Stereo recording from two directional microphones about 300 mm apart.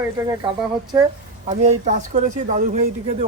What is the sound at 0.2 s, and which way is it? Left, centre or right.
Speech, centre.